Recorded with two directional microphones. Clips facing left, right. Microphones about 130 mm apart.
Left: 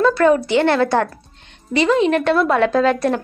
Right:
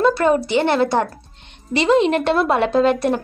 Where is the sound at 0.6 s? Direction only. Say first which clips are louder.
Left 1 dB; 20° right (ahead or behind).